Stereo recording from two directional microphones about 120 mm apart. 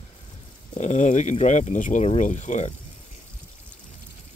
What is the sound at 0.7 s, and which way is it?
Speech, 85° left.